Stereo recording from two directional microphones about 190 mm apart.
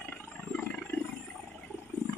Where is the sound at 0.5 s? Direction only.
10° left (ahead or behind).